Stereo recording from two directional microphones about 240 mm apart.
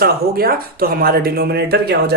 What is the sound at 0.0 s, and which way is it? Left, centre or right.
Speech, right.